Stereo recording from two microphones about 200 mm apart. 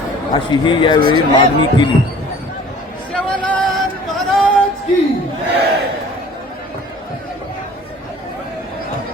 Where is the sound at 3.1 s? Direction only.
5° left (ahead or behind).